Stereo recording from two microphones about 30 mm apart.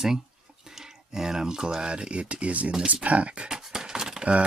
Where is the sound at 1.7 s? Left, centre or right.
Right.